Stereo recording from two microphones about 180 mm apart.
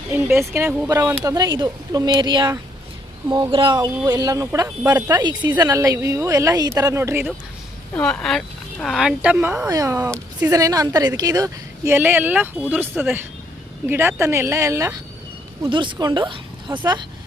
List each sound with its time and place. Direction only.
0.1 s a woman's voice: 15° right (ahead or behind)
7.9 s speech: 5° left (ahead or behind)
9.6 s a woman's voice: 20° right (ahead or behind)
15.6 s speech: 25° right (ahead or behind)